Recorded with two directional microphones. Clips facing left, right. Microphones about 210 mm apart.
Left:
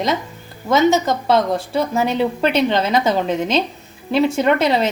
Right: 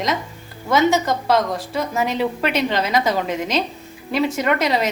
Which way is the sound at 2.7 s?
25° left (ahead or behind).